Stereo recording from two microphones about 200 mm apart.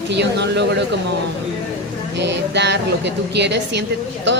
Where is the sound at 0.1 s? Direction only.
60° right (ahead or behind).